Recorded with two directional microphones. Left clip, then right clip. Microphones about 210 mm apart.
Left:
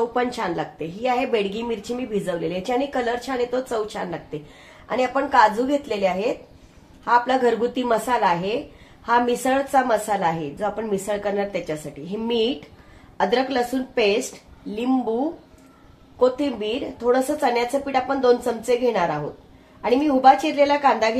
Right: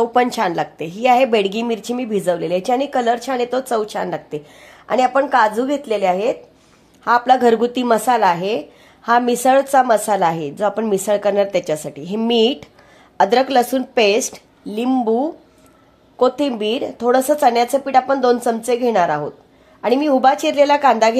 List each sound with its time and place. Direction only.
0.1 s a woman's voice: 55° right (ahead or behind)
16.2 s a woman's voice: 50° right (ahead or behind)